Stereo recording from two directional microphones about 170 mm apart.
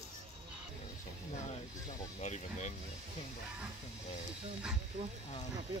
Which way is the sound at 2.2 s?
45° left (ahead or behind).